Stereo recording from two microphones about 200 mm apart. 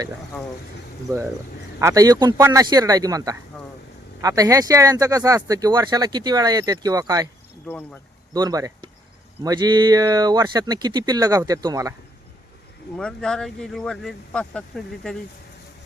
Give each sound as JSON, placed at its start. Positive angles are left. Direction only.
{"t": 1.1, "sound": "speech", "side_deg": -15}
{"t": 7.7, "sound": "speech", "side_deg": 5}
{"t": 8.3, "sound": "speech", "side_deg": -20}
{"t": 13.0, "sound": "speech", "side_deg": 5}